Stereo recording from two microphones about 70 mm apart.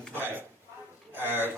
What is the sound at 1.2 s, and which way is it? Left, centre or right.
Speech, right.